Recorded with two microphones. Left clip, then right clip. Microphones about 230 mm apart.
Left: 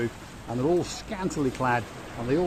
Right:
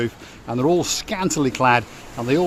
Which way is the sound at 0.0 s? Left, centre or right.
Right.